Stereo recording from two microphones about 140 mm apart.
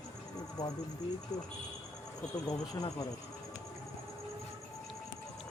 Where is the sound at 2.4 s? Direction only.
25° left (ahead or behind).